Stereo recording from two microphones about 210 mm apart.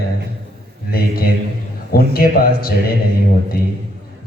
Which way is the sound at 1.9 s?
45° left (ahead or behind).